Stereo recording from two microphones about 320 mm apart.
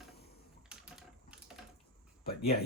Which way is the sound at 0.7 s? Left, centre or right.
Centre.